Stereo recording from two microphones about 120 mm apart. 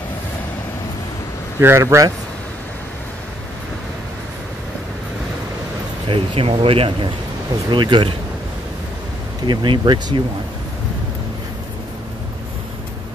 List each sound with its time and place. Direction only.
1.6 s speech: 20° right (ahead or behind)
6.0 s speech: 50° right (ahead or behind)
9.5 s speech: 40° right (ahead or behind)